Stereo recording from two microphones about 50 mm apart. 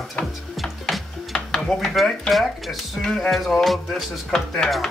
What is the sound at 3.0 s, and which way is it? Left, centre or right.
Music, centre.